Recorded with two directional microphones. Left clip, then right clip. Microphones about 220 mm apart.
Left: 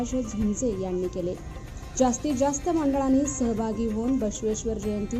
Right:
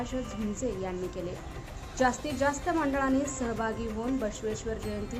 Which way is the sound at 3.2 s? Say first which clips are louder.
Left 4 dB; centre (ahead or behind).